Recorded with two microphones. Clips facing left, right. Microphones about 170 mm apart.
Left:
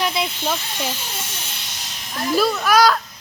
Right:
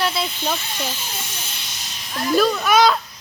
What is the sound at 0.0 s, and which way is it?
Snake, 15° left (ahead or behind).